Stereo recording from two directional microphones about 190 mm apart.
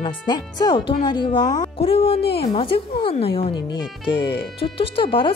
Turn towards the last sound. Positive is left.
turn(degrees=30)  # may be behind; listen again after turning